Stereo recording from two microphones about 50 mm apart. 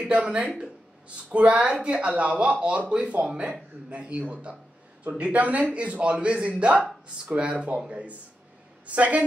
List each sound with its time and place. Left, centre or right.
0.0 s speech: right